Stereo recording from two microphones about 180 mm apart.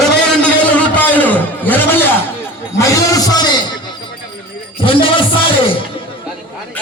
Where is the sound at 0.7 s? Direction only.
10° left (ahead or behind).